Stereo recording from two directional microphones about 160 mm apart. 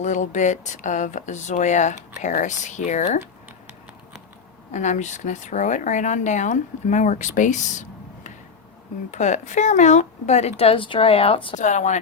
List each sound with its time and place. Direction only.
0.0 s speech: 50° left (ahead or behind)
4.7 s speech: 50° left (ahead or behind)
11.5 s speech: 50° left (ahead or behind)